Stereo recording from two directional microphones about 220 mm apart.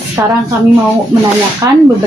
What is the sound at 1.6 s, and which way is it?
Speech, 15° right (ahead or behind).